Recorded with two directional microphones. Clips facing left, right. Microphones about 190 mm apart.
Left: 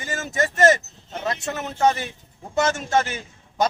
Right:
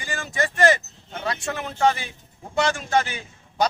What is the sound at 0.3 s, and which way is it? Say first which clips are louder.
Speech: left 2 dB; 45° left (ahead or behind).